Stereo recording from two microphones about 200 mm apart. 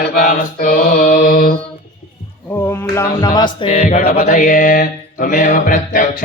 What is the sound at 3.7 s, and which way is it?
Mantra, 35° left (ahead or behind).